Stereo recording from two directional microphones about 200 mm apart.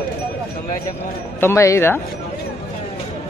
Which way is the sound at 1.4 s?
15° left (ahead or behind).